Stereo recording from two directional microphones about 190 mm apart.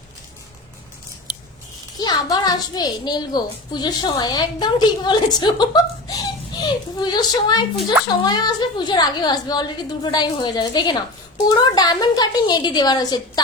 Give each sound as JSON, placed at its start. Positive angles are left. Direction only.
{"t": 2.0, "sound": "a woman's voice", "side_deg": 20}